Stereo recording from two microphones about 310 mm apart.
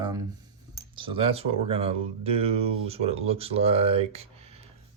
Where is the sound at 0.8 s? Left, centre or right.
Centre.